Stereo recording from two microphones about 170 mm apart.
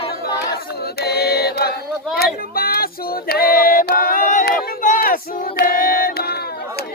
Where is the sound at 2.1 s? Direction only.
60° left (ahead or behind).